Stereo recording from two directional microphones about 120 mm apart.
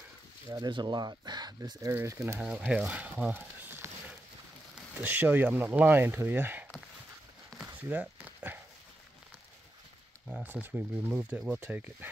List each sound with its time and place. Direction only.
0.5 s speech: 35° right (ahead or behind)
2.4 s speech: 10° right (ahead or behind)
5.0 s speech: 15° right (ahead or behind)
7.6 s a sound: 10° right (ahead or behind)
10.4 s speech: 15° right (ahead or behind)